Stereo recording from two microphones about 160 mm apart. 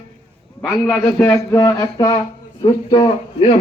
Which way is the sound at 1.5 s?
20° left (ahead or behind).